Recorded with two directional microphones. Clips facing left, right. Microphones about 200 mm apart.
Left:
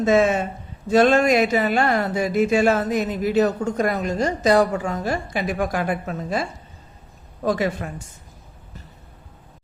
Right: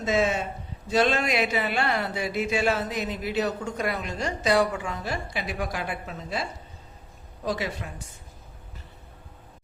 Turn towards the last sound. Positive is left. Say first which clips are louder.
# left 7 dB
turn(degrees=50)  # may be behind; listen again after turning